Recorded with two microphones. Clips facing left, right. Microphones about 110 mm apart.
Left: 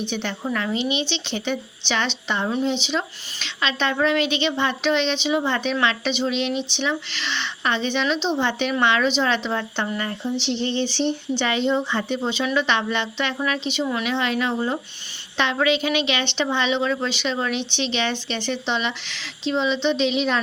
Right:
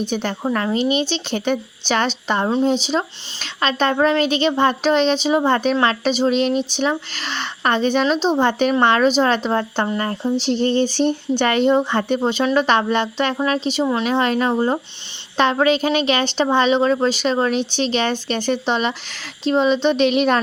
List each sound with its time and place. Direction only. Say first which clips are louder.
0.0 s speech: right 5 dB; 45° right (ahead or behind)